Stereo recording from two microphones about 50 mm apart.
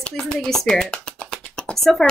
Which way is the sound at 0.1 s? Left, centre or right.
Centre.